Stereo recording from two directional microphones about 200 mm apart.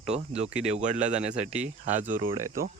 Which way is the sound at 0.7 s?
35° right (ahead or behind).